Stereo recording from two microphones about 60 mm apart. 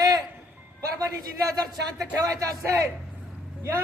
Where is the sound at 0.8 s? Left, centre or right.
Right.